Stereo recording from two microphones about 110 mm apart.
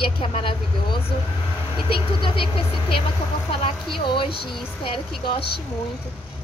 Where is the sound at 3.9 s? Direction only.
50° left (ahead or behind).